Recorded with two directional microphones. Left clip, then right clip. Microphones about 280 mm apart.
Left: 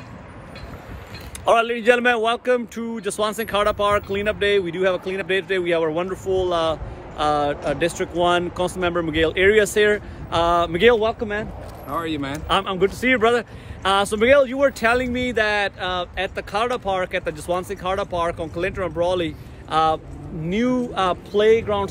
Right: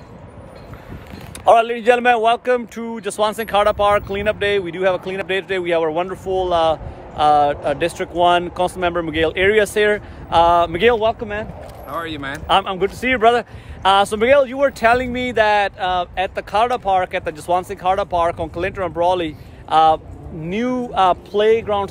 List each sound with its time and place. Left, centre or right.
1.4 s a man's voice: centre
12.4 s a man's voice: centre